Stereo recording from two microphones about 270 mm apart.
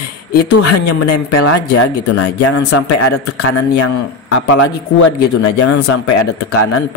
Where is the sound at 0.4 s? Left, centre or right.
Left.